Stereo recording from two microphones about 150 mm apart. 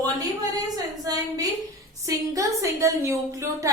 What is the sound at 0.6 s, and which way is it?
A woman's voice, 25° right (ahead or behind).